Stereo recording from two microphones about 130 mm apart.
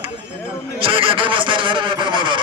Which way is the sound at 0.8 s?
45° right (ahead or behind).